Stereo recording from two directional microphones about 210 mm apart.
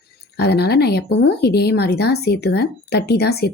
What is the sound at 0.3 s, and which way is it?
Speech, 50° left (ahead or behind).